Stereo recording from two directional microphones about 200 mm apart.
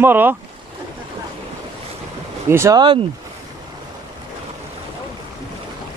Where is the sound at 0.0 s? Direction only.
10° right (ahead or behind).